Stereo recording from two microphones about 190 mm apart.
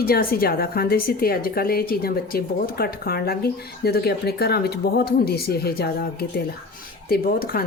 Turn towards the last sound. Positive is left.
turn(degrees=50)  # may be behind; listen again after turning